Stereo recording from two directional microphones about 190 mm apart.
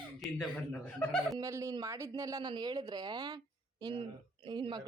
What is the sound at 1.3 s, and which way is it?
Speech, 15° right (ahead or behind).